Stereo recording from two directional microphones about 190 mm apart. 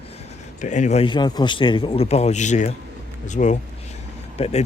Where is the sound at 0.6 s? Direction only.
40° left (ahead or behind).